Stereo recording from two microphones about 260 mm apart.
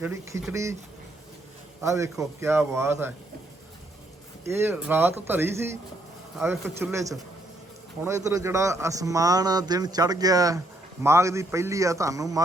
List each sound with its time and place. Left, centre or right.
0.0 s a man's voice: centre
1.8 s a man's voice: centre
4.4 s a man's voice: centre